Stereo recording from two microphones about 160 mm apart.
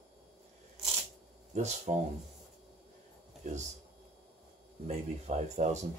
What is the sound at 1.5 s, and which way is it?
Speech, 45° right (ahead or behind).